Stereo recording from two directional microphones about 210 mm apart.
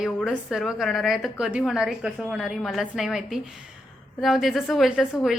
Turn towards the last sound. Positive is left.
turn(degrees=-5)  # may be behind; listen again after turning